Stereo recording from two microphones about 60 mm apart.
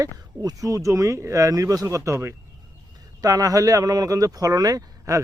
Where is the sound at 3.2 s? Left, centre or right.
Right.